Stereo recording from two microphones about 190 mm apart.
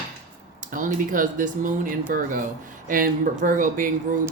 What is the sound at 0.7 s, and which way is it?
Speech, 45° right (ahead or behind).